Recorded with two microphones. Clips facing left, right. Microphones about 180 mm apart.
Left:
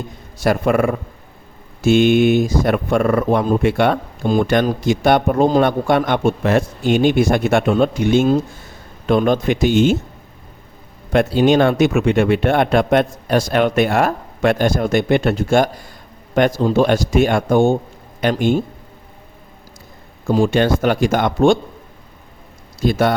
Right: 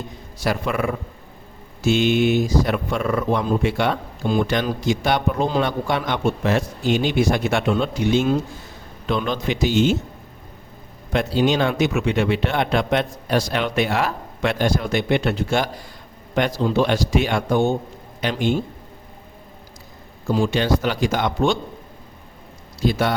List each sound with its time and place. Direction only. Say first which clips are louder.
0.4 s speech: left 7 dB; 50° left (ahead or behind)
11.1 s a man's voice: left 6 dB; 55° left (ahead or behind)
20.2 s speech: left 5 dB; 50° left (ahead or behind)
22.8 s speech: left 4 dB; 50° left (ahead or behind)